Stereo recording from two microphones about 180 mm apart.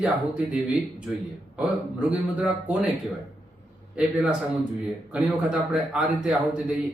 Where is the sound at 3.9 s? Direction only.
5° right (ahead or behind).